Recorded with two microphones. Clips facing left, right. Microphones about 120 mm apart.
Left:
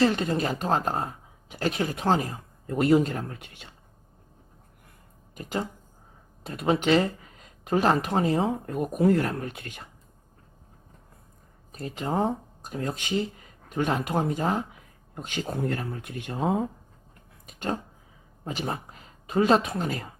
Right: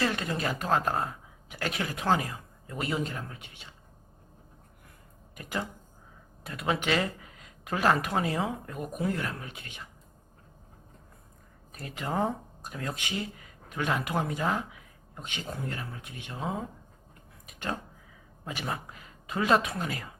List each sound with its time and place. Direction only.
0.0 s speech: 30° left (ahead or behind)
2.2 s speech: 45° left (ahead or behind)
5.3 s speech: 30° left (ahead or behind); by 9.9 s 45° left (ahead or behind)
11.7 s speech: 30° left (ahead or behind); by 16.6 s 50° left (ahead or behind)
17.4 s a sound: 35° left (ahead or behind)
18.4 s speech: 35° left (ahead or behind)